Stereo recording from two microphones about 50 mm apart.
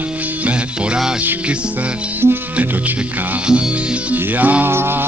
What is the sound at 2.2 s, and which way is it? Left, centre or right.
Speech, right.